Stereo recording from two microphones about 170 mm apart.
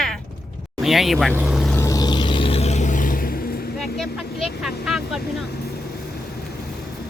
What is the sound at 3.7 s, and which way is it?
Vehicle, centre (ahead or behind).